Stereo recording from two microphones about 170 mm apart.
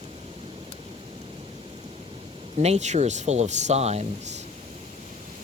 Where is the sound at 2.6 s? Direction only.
40° right (ahead or behind).